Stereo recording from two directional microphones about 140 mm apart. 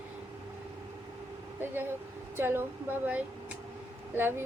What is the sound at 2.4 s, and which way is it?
Speech, 15° right (ahead or behind).